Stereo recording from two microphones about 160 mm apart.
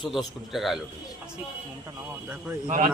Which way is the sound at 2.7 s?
55° right (ahead or behind).